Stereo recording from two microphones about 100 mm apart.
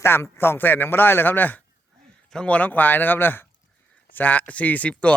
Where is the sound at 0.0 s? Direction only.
25° left (ahead or behind).